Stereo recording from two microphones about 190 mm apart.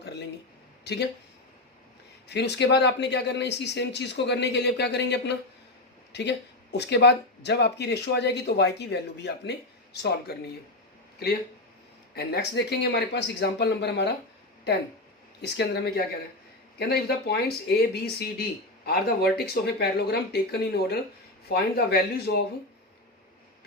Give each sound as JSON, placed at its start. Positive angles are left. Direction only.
{"t": 2.2, "sound": "speech", "side_deg": 60}
{"t": 12.1, "sound": "speech", "side_deg": 60}
{"t": 15.4, "sound": "speech", "side_deg": 60}